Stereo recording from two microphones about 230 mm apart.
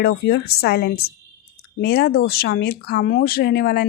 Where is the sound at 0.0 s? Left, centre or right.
Left.